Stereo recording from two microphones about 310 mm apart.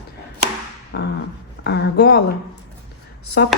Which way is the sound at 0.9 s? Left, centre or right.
Left.